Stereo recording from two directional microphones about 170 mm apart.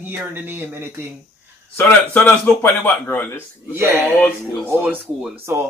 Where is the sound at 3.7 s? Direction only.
15° right (ahead or behind).